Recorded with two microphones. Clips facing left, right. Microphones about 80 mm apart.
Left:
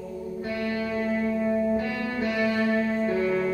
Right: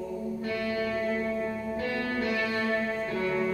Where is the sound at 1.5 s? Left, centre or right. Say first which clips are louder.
Left 7 dB; centre.